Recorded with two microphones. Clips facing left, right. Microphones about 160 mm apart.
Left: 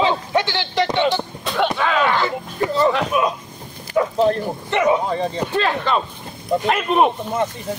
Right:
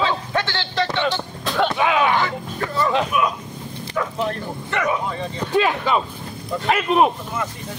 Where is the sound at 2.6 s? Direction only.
20° left (ahead or behind).